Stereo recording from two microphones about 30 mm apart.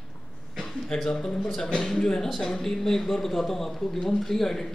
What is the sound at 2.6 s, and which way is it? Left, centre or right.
A man's voice, centre.